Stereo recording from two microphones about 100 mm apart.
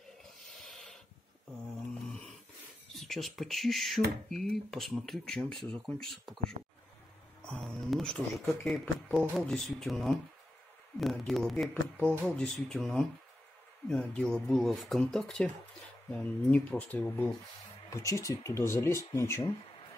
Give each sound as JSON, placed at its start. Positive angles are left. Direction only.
{"t": 0.2, "sound": "a sound", "side_deg": 5}
{"t": 2.0, "sound": "a sound", "side_deg": 5}
{"t": 2.9, "sound": "speech", "side_deg": 0}
{"t": 7.4, "sound": "speech", "side_deg": 5}
{"t": 11.7, "sound": "speech", "side_deg": 15}
{"t": 17.8, "sound": "speech", "side_deg": 30}